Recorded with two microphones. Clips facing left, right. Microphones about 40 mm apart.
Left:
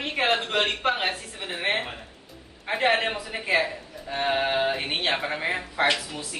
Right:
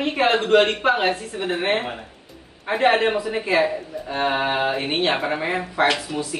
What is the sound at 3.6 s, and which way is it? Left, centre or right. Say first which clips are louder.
A woman's voice: right 7 dB; centre.